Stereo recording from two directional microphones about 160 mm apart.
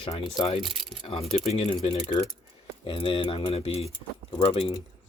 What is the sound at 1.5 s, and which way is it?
Speech, 40° left (ahead or behind).